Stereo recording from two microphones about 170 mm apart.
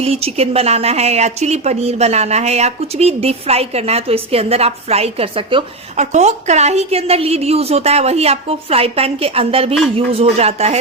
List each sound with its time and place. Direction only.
0.0 s speech: 35° right (ahead or behind)
6.0 s speech: 40° right (ahead or behind)